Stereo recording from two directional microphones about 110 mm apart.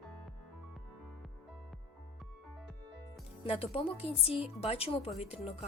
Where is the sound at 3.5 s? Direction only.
60° left (ahead or behind).